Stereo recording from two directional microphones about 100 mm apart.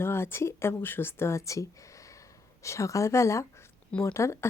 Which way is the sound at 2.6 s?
30° left (ahead or behind).